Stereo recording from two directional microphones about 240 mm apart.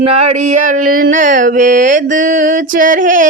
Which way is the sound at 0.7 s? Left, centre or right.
Right.